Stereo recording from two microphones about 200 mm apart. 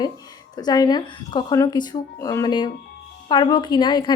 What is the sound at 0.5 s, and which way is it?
Speech, 20° left (ahead or behind).